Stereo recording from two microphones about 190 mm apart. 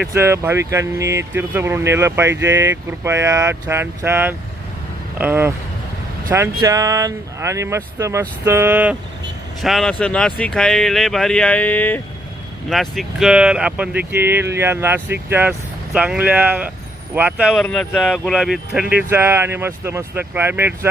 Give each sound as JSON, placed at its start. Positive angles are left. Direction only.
{"t": 0.0, "sound": "speech", "side_deg": -15}
{"t": 17.5, "sound": "speech", "side_deg": 5}